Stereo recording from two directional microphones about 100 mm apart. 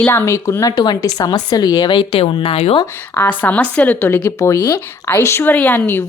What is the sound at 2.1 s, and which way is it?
Speech, 65° left (ahead or behind).